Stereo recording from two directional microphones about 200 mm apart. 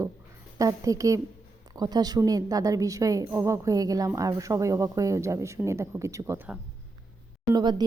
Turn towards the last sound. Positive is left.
turn(degrees=-20)  # may be behind; listen again after turning